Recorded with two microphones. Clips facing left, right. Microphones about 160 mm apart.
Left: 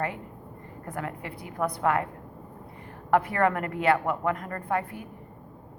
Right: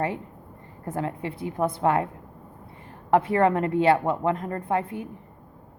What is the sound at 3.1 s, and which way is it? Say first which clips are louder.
A woman's voice: right 3 dB; 25° right (ahead or behind).